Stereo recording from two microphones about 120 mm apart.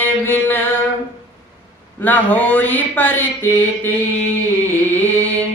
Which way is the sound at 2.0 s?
15° left (ahead or behind).